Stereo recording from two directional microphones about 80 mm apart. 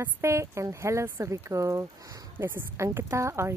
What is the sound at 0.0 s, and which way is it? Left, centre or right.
A woman's voice, right.